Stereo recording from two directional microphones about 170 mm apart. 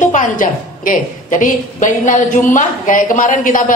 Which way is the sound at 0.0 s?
50° left (ahead or behind).